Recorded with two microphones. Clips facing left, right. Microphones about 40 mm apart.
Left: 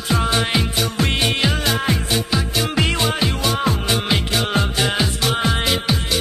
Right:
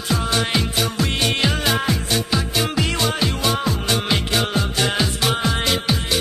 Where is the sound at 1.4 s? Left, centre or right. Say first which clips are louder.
Even; centre.